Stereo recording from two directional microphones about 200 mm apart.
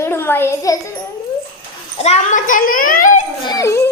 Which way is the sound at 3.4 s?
15° left (ahead or behind).